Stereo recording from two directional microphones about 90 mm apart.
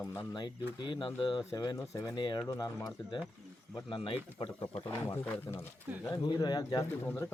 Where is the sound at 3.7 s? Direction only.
65° left (ahead or behind).